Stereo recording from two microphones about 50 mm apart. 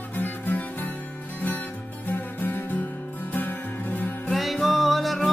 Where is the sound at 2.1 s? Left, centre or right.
Left.